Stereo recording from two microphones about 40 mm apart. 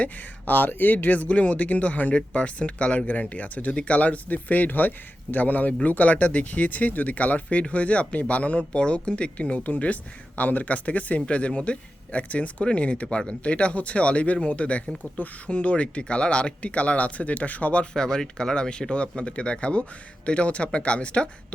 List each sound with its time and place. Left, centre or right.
0.0 s speech: left
9.6 s speech: left
17.9 s speech: centre